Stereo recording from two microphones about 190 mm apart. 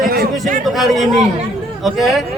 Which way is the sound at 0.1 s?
50° right (ahead or behind).